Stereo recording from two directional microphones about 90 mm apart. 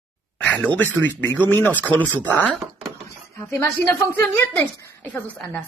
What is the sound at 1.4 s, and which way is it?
A woman's voice, 20° left (ahead or behind).